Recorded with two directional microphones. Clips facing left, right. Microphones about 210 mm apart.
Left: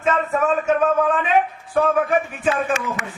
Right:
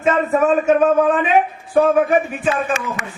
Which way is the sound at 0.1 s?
20° right (ahead or behind).